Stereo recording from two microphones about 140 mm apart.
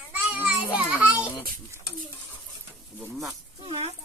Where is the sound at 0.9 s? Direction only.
10° right (ahead or behind).